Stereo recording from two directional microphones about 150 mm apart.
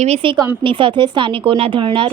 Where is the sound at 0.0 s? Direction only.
40° right (ahead or behind).